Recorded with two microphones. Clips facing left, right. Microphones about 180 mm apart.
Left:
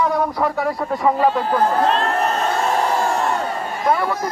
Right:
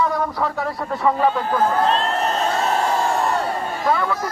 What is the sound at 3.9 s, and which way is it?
Speech, 10° left (ahead or behind).